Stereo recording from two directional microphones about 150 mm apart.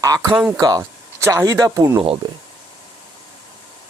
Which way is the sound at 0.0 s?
20° right (ahead or behind).